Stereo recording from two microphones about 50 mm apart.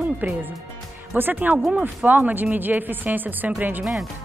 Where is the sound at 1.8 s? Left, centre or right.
Right.